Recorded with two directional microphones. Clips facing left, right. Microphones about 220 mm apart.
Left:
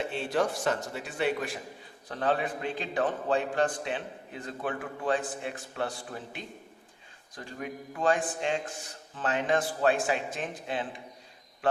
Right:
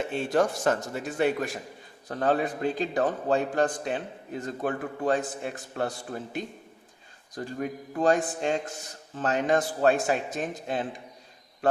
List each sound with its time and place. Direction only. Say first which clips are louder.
0.1 s a man's voice: right 4 dB; 45° right (ahead or behind)
7.3 s a man's voice: right 6 dB; 40° right (ahead or behind)